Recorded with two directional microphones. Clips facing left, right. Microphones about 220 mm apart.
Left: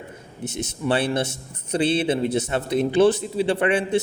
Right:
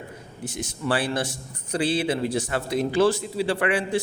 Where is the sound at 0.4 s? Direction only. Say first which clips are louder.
Left 3 dB; 20° left (ahead or behind).